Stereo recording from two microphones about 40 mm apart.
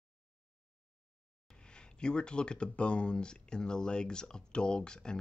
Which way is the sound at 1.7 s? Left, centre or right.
Left.